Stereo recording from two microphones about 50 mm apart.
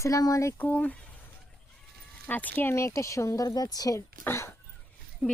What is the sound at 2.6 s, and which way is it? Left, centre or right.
Speech, left.